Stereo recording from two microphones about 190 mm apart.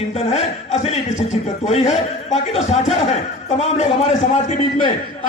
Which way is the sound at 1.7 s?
35° left (ahead or behind).